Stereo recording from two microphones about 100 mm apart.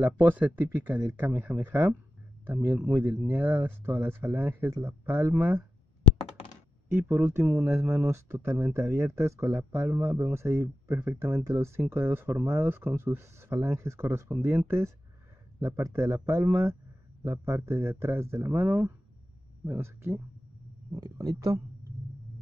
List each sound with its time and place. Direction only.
0.0 s speech: 20° right (ahead or behind)
6.9 s speech: 25° right (ahead or behind)